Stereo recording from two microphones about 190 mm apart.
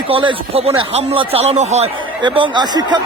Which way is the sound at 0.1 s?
30° right (ahead or behind).